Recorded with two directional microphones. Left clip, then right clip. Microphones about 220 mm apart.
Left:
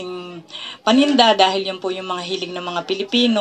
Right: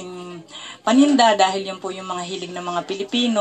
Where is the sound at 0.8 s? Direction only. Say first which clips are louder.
Left 1 dB; 35° left (ahead or behind).